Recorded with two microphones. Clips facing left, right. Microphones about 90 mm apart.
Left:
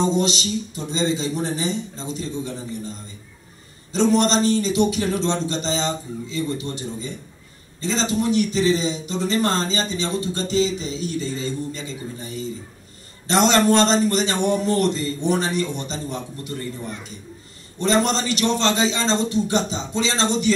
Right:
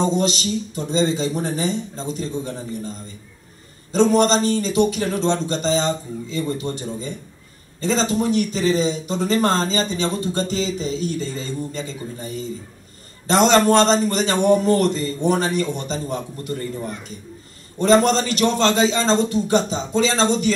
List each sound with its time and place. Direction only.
0.0 s speech: 45° right (ahead or behind)
3.9 s speech: 45° right (ahead or behind)
13.3 s speech: 45° right (ahead or behind)
17.7 s speech: 45° right (ahead or behind)